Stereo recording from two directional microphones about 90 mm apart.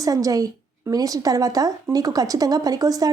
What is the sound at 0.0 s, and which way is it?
A woman's voice, 40° right (ahead or behind).